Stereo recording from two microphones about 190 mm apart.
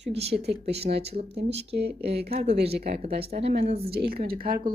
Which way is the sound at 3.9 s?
55° right (ahead or behind).